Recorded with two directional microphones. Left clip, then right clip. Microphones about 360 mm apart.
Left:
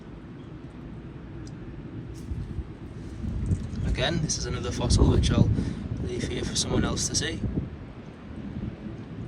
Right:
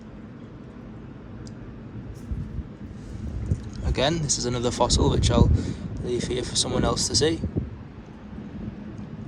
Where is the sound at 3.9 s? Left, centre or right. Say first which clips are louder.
Right 4 dB; centre.